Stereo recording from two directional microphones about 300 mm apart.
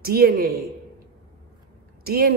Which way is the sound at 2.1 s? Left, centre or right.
Right.